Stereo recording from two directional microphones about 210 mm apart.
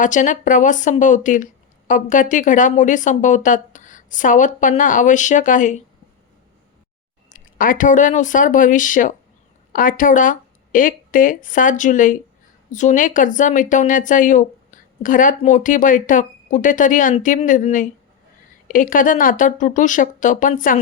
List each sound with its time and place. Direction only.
0.0 s speech: 35° left (ahead or behind)
7.3 s speech: 40° left (ahead or behind)